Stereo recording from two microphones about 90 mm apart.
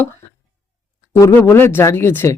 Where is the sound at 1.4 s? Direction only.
25° left (ahead or behind).